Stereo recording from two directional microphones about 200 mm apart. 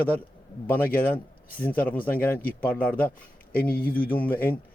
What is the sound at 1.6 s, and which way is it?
Speech, 10° left (ahead or behind).